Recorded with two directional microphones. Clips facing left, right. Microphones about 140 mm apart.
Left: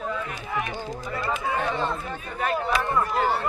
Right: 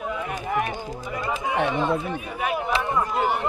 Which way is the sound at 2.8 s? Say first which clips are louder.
Even; 15° right (ahead or behind).